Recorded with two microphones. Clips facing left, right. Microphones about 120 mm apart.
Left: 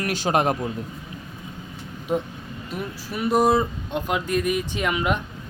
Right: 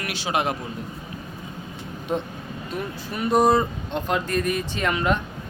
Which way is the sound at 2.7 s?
5° left (ahead or behind).